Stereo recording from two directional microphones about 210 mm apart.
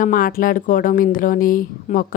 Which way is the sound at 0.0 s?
40° left (ahead or behind).